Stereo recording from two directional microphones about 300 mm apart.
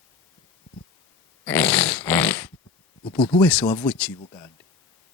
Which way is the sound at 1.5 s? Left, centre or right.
Centre.